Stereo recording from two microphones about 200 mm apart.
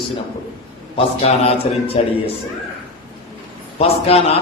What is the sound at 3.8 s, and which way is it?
Speech, 30° left (ahead or behind).